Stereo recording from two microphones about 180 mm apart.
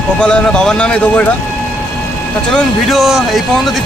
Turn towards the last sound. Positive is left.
turn(degrees=0)  # may be behind; listen again after turning